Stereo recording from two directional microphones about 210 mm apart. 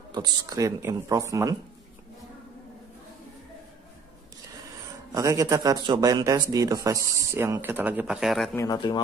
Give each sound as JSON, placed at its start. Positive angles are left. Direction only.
{"t": 0.1, "sound": "speech", "side_deg": -20}
{"t": 5.1, "sound": "speech", "side_deg": -15}
{"t": 8.5, "sound": "speech", "side_deg": 20}